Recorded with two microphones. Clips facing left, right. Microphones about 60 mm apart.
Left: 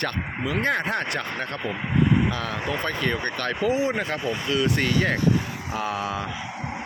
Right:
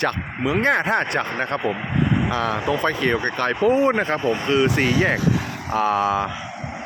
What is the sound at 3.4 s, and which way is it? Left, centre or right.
Speech, right.